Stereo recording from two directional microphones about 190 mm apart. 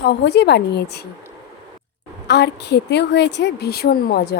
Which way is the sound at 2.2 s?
60° left (ahead or behind).